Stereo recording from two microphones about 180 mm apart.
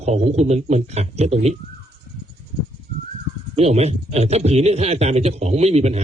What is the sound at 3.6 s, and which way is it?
Speech, 35° right (ahead or behind).